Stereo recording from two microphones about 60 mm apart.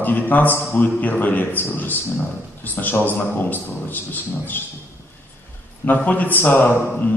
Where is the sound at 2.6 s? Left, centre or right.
Left.